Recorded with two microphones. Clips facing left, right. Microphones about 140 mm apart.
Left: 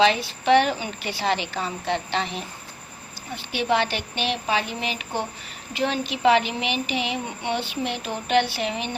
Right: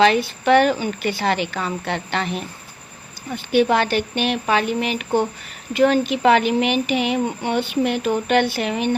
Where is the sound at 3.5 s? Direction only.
50° right (ahead or behind).